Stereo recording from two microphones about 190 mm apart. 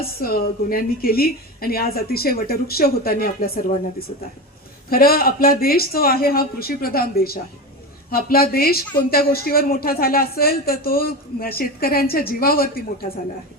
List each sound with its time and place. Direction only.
0.0 s a woman's voice: 50° left (ahead or behind)